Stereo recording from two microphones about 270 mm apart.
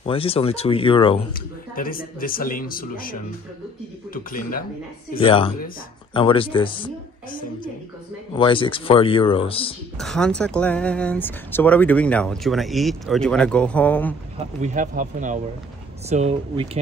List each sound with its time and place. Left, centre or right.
0.0 s speech: left
1.3 s speech: left
5.1 s speech: centre
8.4 s speech: centre
9.9 s speech: centre
14.6 s speech: right